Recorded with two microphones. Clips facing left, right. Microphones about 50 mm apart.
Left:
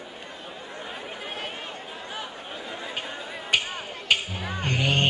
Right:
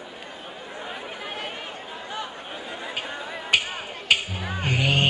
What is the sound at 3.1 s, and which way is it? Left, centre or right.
Music, centre.